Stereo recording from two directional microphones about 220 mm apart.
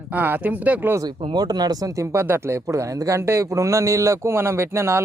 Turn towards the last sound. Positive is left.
turn(degrees=-10)  # may be behind; listen again after turning